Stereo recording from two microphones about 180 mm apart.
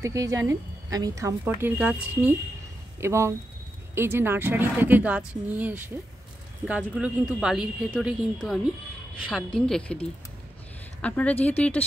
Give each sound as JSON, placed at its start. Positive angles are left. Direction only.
{"t": 0.0, "sound": "speech", "side_deg": -20}
{"t": 6.9, "sound": "speech", "side_deg": -5}
{"t": 11.0, "sound": "speech", "side_deg": 5}